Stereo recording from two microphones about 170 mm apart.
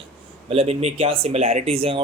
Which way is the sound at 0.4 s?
35° right (ahead or behind).